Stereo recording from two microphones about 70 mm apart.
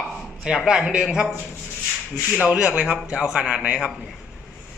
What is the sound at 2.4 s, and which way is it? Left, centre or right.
A man's voice, centre.